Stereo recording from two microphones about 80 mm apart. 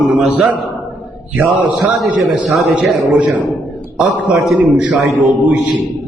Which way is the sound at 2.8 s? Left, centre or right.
Centre.